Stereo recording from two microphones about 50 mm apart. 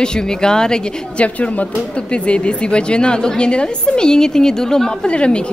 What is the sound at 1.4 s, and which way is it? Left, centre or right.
Speech, left.